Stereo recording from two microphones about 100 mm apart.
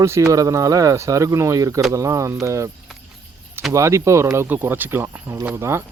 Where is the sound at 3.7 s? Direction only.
30° right (ahead or behind).